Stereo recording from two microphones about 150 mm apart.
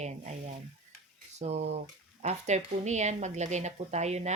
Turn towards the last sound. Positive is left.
turn(degrees=-50)  # may be behind; listen again after turning